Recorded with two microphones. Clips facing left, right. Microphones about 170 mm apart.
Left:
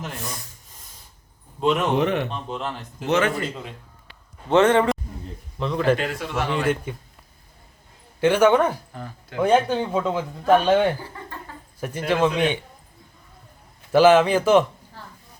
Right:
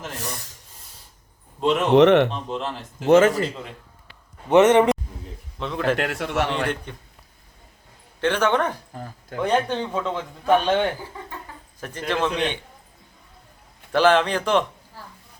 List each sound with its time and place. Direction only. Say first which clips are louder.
0.1 s speech: right 1 dB; 90° right
2.0 s a man's voice: right 8 dB; 75° right (ahead or behind)
2.3 s speech: right 1 dB; 5° left (ahead or behind)
3.1 s a man's voice: right 6 dB; 40° right (ahead or behind)
4.4 s a man's voice: right 2 dB; 20° right (ahead or behind)
5.5 s speech: left 3 dB; centre (ahead or behind)
6.0 s a man's voice: right 2 dB; 70° right (ahead or behind)
6.9 s speech: left 5 dB; 10° left (ahead or behind)
8.2 s speech: left 4 dB; 10° left (ahead or behind)
13.9 s speech: left 4 dB; 10° left (ahead or behind)